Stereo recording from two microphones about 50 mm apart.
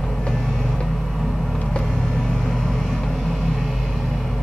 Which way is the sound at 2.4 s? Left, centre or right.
Centre.